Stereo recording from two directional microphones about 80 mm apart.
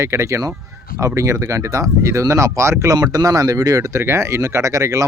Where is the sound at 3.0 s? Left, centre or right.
Right.